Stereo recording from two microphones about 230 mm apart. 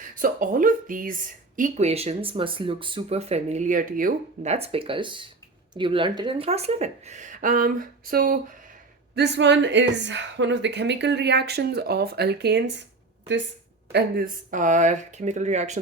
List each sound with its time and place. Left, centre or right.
0.2 s a woman's voice: right
13.9 s speech: right